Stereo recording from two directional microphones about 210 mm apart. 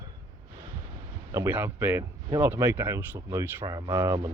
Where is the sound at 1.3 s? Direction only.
10° right (ahead or behind).